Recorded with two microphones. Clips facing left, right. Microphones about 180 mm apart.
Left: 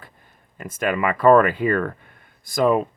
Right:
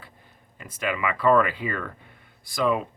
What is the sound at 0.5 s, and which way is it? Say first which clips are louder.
Speech: left 6 dB; 50° left (ahead or behind).